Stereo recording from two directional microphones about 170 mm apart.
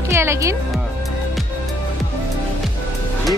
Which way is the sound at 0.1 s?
15° right (ahead or behind).